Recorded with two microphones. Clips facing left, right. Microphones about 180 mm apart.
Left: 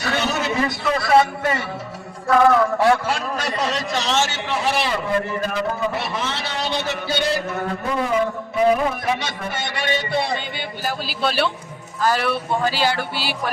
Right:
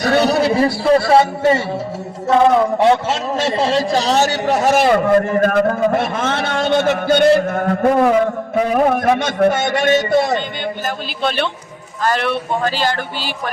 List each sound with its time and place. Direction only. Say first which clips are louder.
0.0 s music: right 9 dB; 40° right (ahead or behind)
2.2 s a man's voice: right 3 dB; 20° right (ahead or behind); by 10.4 s 45° right (ahead or behind)
10.8 s a man's voice: left 1 dB; 5° left (ahead or behind)